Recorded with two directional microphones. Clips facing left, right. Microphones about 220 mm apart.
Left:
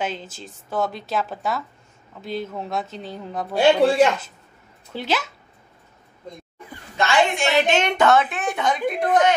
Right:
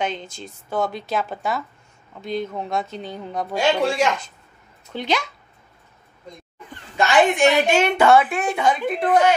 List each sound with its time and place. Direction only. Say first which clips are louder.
0.0 s a woman's voice: right 2 dB; 5° left (ahead or behind)
3.5 s speech: left 5 dB; 35° left (ahead or behind)
4.9 s a woman's voice: right 1 dB; 5° left (ahead or behind)
7.0 s a woman's voice: right 4 dB; 10° right (ahead or behind)